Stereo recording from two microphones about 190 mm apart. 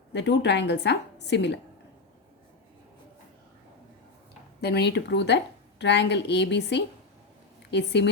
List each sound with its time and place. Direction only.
0.1 s a woman's voice: 65° left (ahead or behind)
4.6 s a woman's voice: 60° left (ahead or behind)